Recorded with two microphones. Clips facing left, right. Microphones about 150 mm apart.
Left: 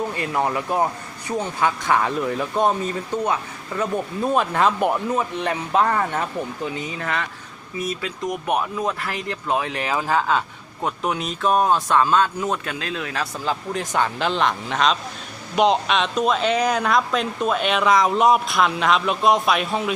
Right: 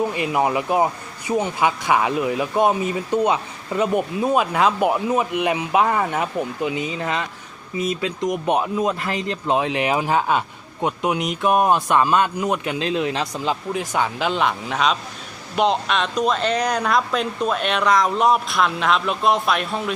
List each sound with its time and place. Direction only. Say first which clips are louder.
0.1 s speech: right 3 dB; 15° right (ahead or behind)
4.2 s speech: even; 5° right (ahead or behind)